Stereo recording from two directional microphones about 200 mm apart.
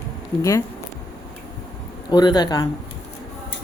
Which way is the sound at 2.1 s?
20° left (ahead or behind).